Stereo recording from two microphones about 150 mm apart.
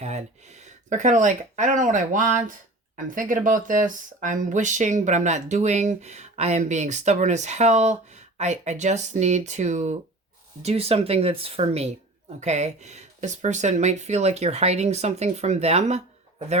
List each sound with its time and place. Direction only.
0.0 s speech: 50° right (ahead or behind)